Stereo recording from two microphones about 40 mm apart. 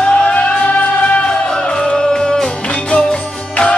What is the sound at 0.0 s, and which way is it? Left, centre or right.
Music, left.